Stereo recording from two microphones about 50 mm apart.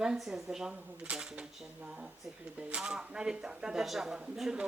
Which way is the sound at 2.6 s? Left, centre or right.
Centre.